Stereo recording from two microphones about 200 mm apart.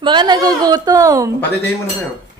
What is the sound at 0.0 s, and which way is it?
A woman's voice, 20° right (ahead or behind).